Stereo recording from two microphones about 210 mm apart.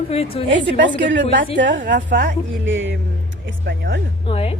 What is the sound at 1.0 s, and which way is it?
Speech, 55° right (ahead or behind).